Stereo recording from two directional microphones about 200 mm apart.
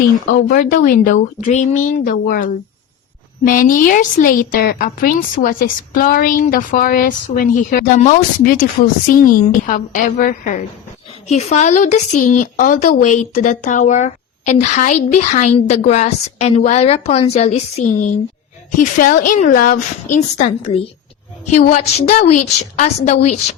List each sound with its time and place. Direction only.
0.3 s a woman's voice: 45° left (ahead or behind)
21.5 s a woman's voice: 45° left (ahead or behind)
21.9 s speech: 30° left (ahead or behind)